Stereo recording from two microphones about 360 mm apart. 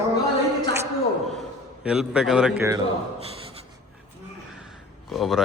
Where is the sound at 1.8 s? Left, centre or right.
Centre.